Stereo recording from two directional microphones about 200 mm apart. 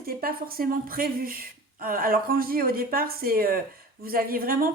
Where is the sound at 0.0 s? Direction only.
45° right (ahead or behind).